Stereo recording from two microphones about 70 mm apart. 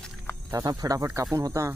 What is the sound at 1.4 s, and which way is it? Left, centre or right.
Speech, right.